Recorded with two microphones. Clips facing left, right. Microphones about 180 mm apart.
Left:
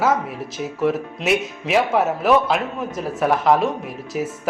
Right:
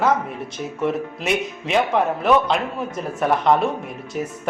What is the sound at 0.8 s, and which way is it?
Speech, centre (ahead or behind).